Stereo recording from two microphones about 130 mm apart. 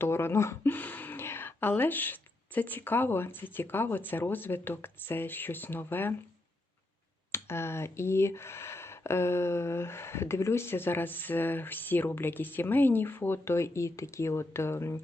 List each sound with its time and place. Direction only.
0.0 s speech: 20° left (ahead or behind)
7.3 s speech: 20° left (ahead or behind)